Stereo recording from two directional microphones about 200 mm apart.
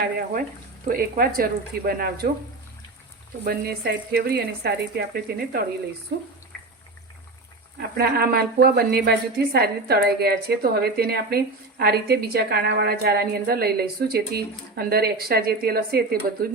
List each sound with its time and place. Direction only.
0.9 s a woman's voice: 45° right (ahead or behind)
3.4 s a woman's voice: 50° right (ahead or behind)
6.5 s water: 5° left (ahead or behind)
7.8 s a woman's voice: 50° right (ahead or behind)